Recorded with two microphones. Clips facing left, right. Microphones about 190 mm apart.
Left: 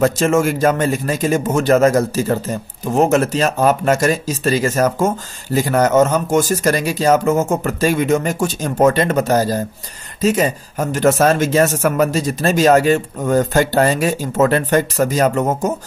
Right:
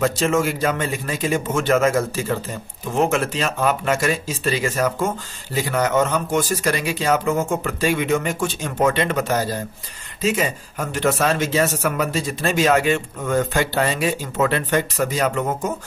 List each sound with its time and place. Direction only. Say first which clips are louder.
0.0 s a man's voice: left 5 dB; 45° left (ahead or behind)